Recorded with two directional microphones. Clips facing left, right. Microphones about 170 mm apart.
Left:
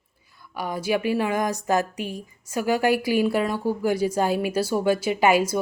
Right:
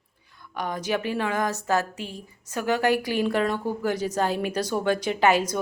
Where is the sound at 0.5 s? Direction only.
10° left (ahead or behind).